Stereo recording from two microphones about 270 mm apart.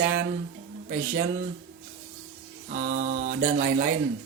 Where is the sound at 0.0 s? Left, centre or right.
Right.